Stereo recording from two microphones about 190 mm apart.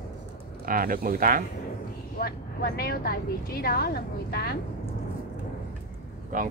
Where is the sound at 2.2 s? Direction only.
50° left (ahead or behind).